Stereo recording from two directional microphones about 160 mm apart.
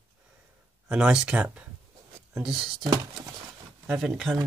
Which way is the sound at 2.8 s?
20° right (ahead or behind).